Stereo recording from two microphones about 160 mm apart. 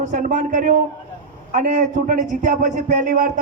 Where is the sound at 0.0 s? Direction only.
50° right (ahead or behind).